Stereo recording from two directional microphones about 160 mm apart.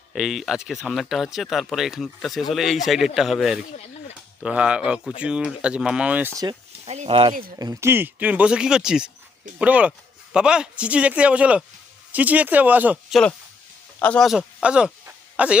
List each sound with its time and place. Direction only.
0.1 s speech: centre (ahead or behind)
6.8 s speech: 45° right (ahead or behind)
7.6 s speech: 20° right (ahead or behind)
14.0 s speech: 5° left (ahead or behind)